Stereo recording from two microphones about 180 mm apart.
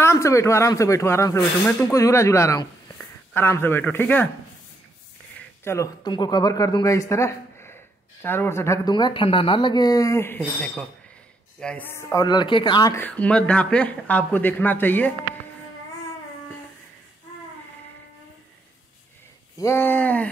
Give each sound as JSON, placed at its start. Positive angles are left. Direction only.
{"t": 0.0, "sound": "speech", "side_deg": 15}
{"t": 5.6, "sound": "speech", "side_deg": 15}
{"t": 19.6, "sound": "speech", "side_deg": 10}